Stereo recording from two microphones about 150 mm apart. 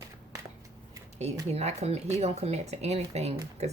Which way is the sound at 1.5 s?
45° right (ahead or behind).